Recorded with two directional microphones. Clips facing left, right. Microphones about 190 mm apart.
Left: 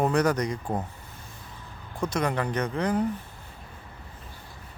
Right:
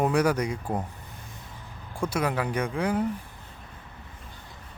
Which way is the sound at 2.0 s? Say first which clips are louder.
Even; 5° right (ahead or behind).